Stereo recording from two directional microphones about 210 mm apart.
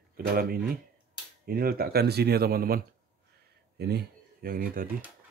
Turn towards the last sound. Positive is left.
turn(degrees=-45)  # may be behind; listen again after turning